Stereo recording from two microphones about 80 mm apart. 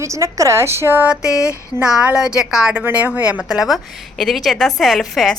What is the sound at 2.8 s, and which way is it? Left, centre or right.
A woman's voice, right.